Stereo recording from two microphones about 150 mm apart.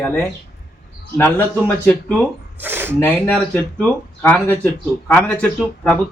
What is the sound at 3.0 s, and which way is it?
A woman's voice, 10° left (ahead or behind).